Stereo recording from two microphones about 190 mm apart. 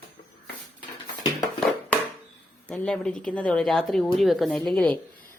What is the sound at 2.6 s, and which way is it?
Speech, 5° left (ahead or behind).